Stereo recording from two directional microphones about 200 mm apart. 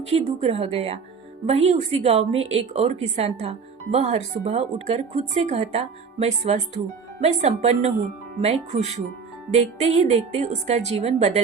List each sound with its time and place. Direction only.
0.1 s speech: 30° right (ahead or behind)